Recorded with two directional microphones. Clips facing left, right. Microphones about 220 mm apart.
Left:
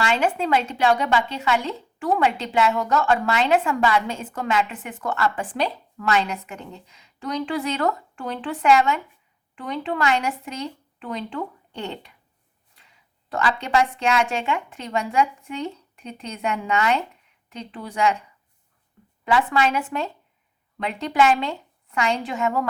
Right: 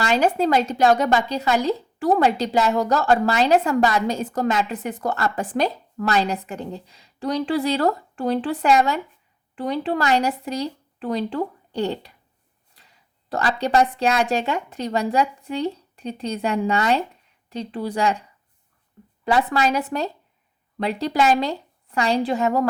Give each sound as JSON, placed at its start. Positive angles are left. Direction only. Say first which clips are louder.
{"t": 0.0, "sound": "a woman's voice", "louder": "right 3 dB", "side_deg": -40}
{"t": 12.8, "sound": "a sound", "louder": "right 2 dB", "side_deg": -35}
{"t": 13.3, "sound": "a woman's voice", "louder": "right 2 dB", "side_deg": -35}
{"t": 19.2, "sound": "a woman's voice", "louder": "right 1 dB", "side_deg": -40}